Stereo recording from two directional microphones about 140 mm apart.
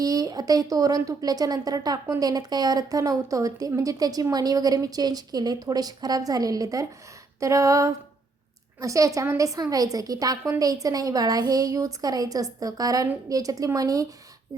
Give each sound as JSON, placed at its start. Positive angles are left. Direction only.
{"t": 0.0, "sound": "a woman's voice", "side_deg": -25}